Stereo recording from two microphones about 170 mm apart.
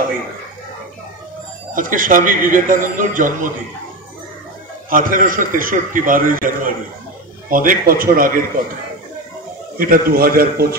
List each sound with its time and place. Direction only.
1.7 s a man's voice: 55° right (ahead or behind)
4.8 s a man's voice: 55° right (ahead or behind)
9.8 s a man's voice: 55° right (ahead or behind)